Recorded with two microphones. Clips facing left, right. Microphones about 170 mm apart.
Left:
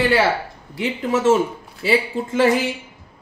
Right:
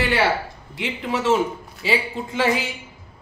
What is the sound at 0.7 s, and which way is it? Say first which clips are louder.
Speech: left 5 dB; 45° left (ahead or behind).